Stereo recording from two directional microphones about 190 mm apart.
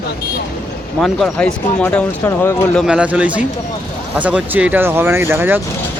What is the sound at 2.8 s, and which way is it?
Speech, 5° right (ahead or behind).